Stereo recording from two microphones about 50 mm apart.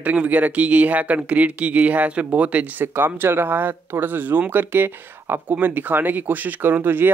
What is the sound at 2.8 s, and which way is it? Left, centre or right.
A man's voice, right.